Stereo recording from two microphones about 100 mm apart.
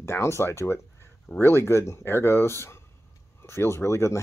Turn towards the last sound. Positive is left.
turn(degrees=25)  # may be behind; listen again after turning